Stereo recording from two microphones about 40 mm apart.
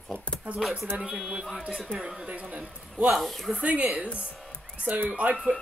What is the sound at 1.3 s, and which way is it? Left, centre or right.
Speech, centre.